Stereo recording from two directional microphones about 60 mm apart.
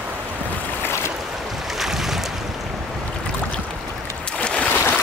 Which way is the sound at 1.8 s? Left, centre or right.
Centre.